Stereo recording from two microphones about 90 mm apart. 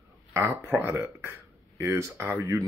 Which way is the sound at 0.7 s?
25° right (ahead or behind).